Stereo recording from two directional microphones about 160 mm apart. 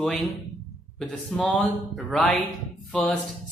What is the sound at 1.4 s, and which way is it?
Speech, 5° left (ahead or behind).